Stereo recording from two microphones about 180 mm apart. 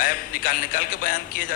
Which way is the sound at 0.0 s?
50° left (ahead or behind).